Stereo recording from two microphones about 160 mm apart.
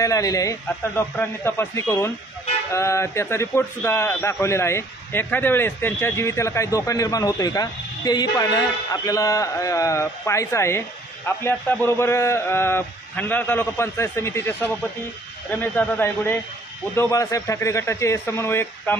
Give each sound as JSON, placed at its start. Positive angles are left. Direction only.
{"t": 0.0, "sound": "a man's voice", "side_deg": 20}